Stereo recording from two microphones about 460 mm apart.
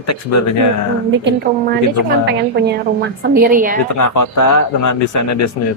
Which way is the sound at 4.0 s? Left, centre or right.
Left.